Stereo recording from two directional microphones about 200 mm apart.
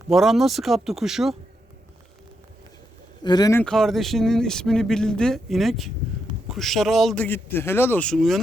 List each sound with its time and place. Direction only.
0.1 s speech: centre (ahead or behind)
3.2 s speech: 20° left (ahead or behind)
3.6 s speech: centre (ahead or behind)